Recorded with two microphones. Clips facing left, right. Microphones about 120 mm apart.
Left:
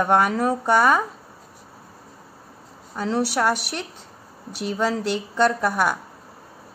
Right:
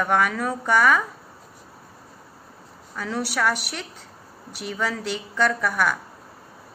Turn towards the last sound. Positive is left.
turn(degrees=25)  # may be behind; listen again after turning